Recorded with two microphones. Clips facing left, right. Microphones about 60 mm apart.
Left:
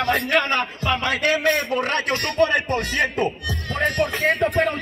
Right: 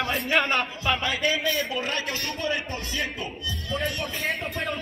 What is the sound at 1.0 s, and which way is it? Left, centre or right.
Music, left.